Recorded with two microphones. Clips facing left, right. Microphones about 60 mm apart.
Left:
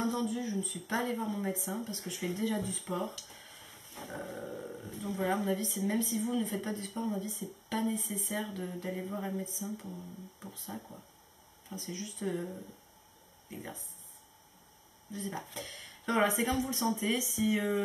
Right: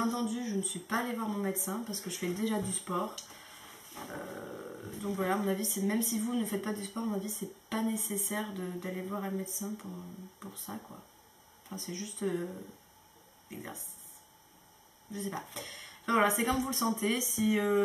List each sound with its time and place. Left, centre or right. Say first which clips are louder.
0.0 s a sound: even; centre
1.0 s speech: even; centre
3.0 s dog: right 2 dB; centre
4.5 s speech: left 1 dB; centre
10.8 s speech: right 1 dB; right
11.7 s speech: even; centre
13.5 s speech: even; centre
15.1 s speech: right 1 dB; centre